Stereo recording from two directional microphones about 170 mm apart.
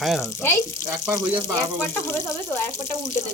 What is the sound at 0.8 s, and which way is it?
Speech, 20° right (ahead or behind).